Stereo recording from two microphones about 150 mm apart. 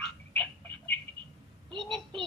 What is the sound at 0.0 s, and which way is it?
Frog, 10° left (ahead or behind).